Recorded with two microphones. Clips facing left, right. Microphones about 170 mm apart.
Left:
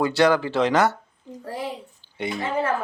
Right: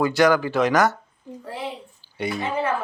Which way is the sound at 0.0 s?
30° left (ahead or behind).